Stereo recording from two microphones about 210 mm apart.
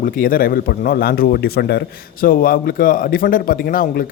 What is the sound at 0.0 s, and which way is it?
A man's voice, 40° left (ahead or behind).